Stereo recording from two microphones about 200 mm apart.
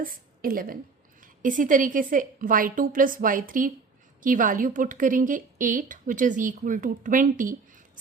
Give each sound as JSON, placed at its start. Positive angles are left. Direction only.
{"t": 0.0, "sound": "a woman's voice", "side_deg": -45}